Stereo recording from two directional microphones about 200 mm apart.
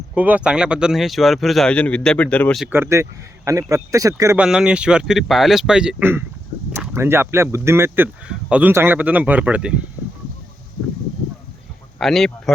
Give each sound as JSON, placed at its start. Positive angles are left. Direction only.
{"t": 0.1, "sound": "speech", "side_deg": -5}
{"t": 2.6, "sound": "speech", "side_deg": -10}
{"t": 4.4, "sound": "speech", "side_deg": -5}
{"t": 11.9, "sound": "speech", "side_deg": 0}